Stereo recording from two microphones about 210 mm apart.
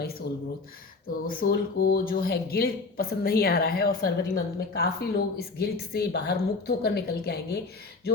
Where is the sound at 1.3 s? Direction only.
45° left (ahead or behind).